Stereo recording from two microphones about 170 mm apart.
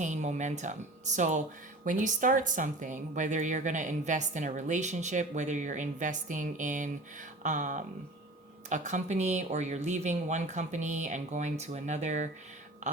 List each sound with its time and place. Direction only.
0.0 s a woman's voice: 45° right (ahead or behind)